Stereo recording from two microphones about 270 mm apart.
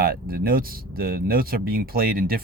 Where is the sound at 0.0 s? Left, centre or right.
Right.